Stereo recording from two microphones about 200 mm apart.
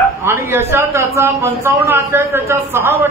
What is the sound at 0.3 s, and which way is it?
A man's voice, 10° right (ahead or behind).